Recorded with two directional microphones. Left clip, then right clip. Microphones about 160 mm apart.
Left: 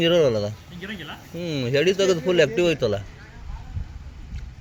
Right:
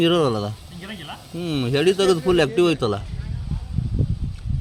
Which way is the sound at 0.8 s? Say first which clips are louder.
Even; centre (ahead or behind).